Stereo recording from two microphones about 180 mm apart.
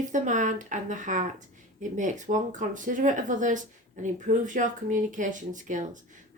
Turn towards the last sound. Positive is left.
turn(degrees=-45)  # may be behind; listen again after turning